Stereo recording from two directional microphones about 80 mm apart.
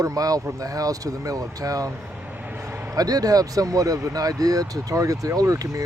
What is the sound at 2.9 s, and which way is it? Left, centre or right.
Speech, right.